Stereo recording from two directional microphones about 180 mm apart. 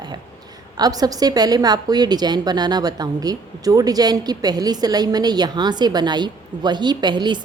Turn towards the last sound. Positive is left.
turn(degrees=-25)  # may be behind; listen again after turning